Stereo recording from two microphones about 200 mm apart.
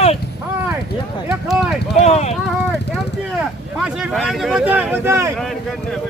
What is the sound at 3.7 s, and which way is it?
Speech, 5° right (ahead or behind).